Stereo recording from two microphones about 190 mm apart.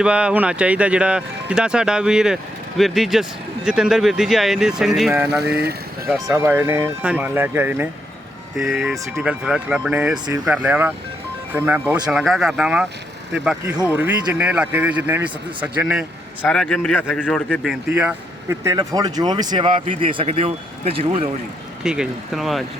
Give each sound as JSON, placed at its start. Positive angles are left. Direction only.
{"t": 0.0, "sound": "speech", "side_deg": -5}
{"t": 16.4, "sound": "speech", "side_deg": 5}
{"t": 21.8, "sound": "speech", "side_deg": -5}